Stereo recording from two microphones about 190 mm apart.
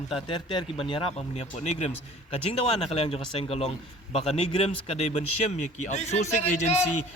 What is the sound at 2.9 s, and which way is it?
A man's voice, 30° left (ahead or behind).